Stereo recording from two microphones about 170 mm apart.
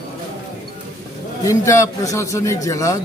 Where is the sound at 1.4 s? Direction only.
20° left (ahead or behind).